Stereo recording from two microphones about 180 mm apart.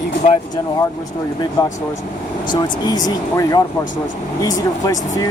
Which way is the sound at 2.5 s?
20° left (ahead or behind).